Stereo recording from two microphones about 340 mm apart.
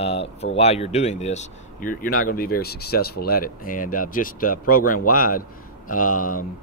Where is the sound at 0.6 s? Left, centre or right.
Centre.